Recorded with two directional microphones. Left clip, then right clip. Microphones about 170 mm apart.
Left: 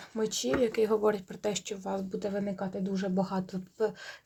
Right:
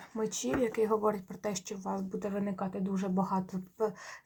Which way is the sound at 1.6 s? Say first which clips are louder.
Left 4 dB; 55° left (ahead or behind).